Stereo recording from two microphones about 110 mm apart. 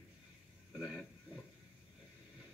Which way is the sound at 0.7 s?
Centre (ahead or behind).